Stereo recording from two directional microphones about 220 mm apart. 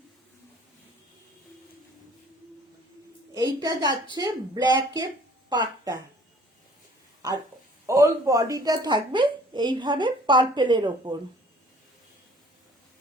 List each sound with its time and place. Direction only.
3.3 s a child's voice: 15° right (ahead or behind)
7.9 s a woman's voice: 15° right (ahead or behind)